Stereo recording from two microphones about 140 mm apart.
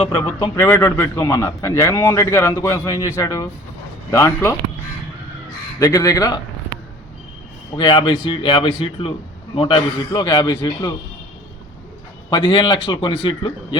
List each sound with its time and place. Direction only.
0.2 s a man's voice: 35° left (ahead or behind)
0.6 s a man's voice: 15° left (ahead or behind)
5.8 s a man's voice: 25° left (ahead or behind)
7.8 s a man's voice: 35° left (ahead or behind)
12.3 s a man's voice: 35° left (ahead or behind)